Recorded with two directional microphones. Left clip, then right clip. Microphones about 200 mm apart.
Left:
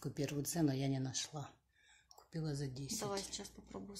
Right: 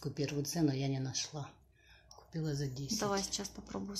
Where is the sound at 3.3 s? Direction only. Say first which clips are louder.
Right 7 dB; 10° right (ahead or behind).